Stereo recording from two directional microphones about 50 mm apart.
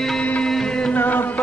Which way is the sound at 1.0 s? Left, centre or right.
Left.